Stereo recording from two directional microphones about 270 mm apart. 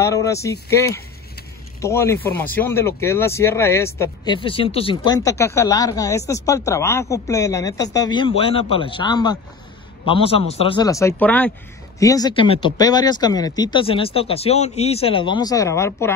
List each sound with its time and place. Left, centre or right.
0.0 s speech: centre